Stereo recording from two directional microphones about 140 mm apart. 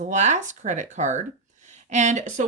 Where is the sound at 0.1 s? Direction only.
55° right (ahead or behind).